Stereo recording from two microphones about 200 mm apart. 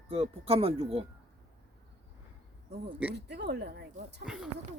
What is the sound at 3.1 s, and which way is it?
Speech, 55° right (ahead or behind).